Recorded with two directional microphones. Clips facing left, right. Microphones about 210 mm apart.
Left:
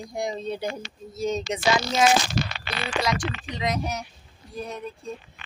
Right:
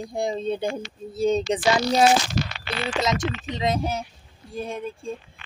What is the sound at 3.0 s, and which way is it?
Speech, 20° right (ahead or behind).